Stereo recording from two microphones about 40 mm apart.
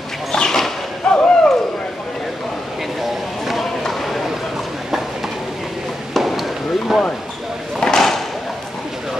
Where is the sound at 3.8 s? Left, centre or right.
Centre.